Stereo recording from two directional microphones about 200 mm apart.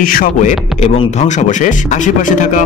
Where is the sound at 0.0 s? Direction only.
45° left (ahead or behind).